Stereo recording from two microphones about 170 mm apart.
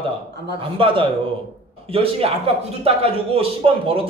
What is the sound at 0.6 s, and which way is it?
A man's voice, 30° right (ahead or behind).